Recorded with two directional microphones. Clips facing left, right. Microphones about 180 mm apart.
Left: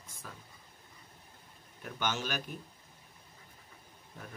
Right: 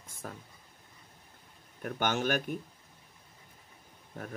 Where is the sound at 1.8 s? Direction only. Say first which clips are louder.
Right 6 dB; 55° right (ahead or behind).